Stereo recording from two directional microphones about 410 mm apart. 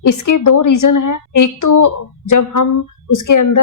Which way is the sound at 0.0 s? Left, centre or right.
Left.